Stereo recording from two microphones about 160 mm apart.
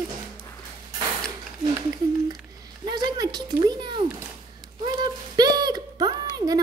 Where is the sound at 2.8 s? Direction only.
25° right (ahead or behind).